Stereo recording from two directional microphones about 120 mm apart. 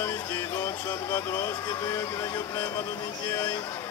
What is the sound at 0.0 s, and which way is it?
Music, 20° left (ahead or behind).